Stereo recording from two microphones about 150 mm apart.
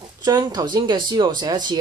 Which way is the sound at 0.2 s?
25° right (ahead or behind).